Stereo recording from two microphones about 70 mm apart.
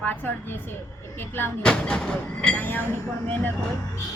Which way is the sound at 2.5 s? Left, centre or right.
Left.